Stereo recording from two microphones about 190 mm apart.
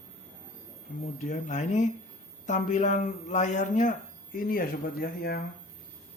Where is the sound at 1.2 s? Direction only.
40° left (ahead or behind).